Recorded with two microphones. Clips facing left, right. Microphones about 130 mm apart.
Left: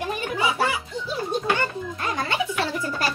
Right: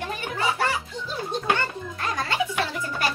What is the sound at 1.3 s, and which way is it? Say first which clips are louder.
Music: left 1 dB; 15° left (ahead or behind).